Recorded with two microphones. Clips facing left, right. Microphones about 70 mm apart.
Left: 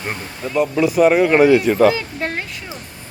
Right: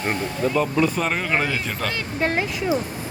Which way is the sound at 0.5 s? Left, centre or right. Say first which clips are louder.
Left 7 dB; centre.